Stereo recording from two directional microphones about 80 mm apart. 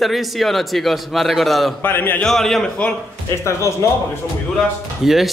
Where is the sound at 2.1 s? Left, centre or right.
Centre.